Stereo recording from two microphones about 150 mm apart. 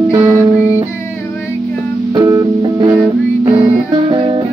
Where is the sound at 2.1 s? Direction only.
25° right (ahead or behind).